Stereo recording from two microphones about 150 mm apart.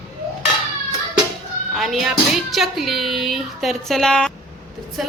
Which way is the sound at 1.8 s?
Centre (ahead or behind).